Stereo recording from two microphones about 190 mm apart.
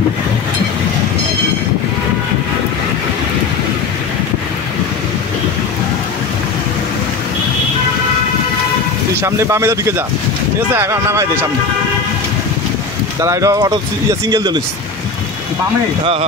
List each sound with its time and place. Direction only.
9.2 s speech: 15° right (ahead or behind)
13.2 s speech: 15° right (ahead or behind)